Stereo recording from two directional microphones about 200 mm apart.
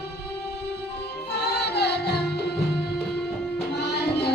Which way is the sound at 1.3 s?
55° left (ahead or behind).